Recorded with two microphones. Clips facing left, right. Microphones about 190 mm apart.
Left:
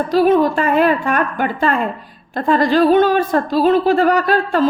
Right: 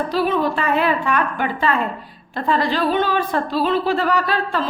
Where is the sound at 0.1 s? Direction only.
45° left (ahead or behind).